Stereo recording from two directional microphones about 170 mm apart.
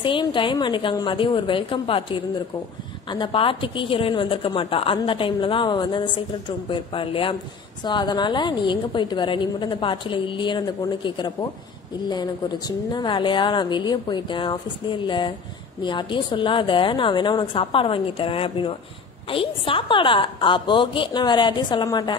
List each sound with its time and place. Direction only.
0.0 s a woman's voice: 30° left (ahead or behind)